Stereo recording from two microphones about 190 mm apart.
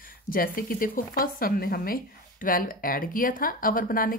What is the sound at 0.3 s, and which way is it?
Speech, 50° left (ahead or behind).